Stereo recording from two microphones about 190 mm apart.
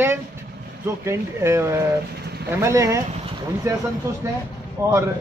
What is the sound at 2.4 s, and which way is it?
Speech, 15° right (ahead or behind).